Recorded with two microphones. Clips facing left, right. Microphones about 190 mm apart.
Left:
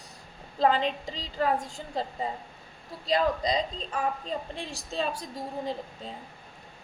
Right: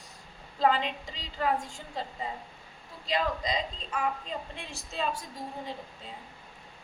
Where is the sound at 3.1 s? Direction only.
35° left (ahead or behind).